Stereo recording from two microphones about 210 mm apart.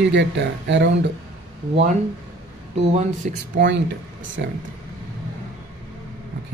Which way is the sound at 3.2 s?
40° right (ahead or behind).